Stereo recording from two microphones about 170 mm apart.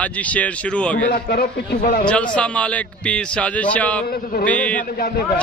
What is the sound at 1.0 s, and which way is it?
A man's voice, 60° left (ahead or behind).